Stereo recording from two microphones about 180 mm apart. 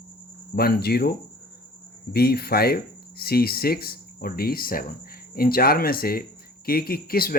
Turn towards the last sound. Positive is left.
turn(degrees=55)  # may be behind; listen again after turning